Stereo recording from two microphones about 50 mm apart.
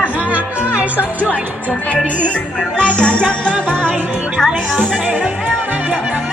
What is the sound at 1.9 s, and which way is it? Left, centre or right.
Music, left.